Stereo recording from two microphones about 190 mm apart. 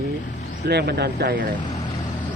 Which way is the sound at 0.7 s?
60° right (ahead or behind).